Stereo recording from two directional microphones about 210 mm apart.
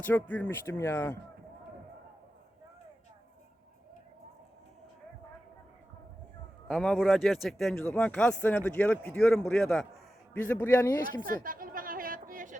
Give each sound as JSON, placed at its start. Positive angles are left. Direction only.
{"t": 0.0, "sound": "speech", "side_deg": 10}
{"t": 6.7, "sound": "speech", "side_deg": 0}
{"t": 11.4, "sound": "chatter", "side_deg": -40}